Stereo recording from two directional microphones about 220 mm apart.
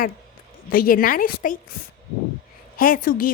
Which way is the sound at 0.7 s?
40° left (ahead or behind).